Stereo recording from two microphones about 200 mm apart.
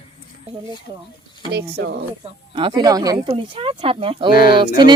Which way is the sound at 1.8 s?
55° right (ahead or behind).